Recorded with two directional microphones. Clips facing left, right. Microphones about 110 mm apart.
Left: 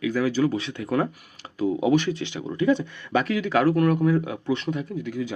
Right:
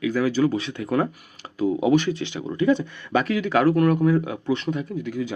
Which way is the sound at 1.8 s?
35° right (ahead or behind).